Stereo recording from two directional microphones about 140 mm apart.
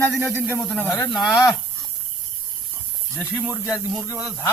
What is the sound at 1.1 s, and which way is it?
Speech, centre (ahead or behind).